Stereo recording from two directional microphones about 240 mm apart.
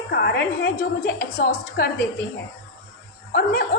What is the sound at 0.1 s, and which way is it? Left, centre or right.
A woman's voice, left.